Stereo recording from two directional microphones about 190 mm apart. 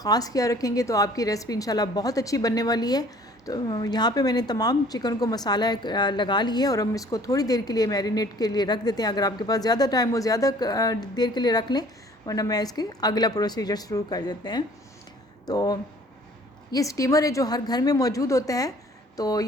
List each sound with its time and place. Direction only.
0.0 s a woman's voice: 20° left (ahead or behind)